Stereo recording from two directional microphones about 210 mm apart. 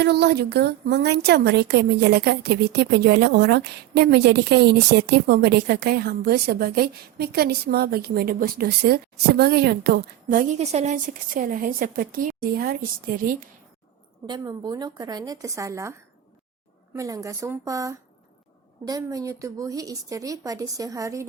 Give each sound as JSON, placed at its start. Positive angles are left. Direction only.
{"t": 0.0, "sound": "a woman's voice", "side_deg": -50}
{"t": 14.3, "sound": "speech", "side_deg": -20}